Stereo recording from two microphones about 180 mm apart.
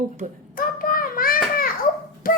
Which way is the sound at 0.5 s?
50° left (ahead or behind).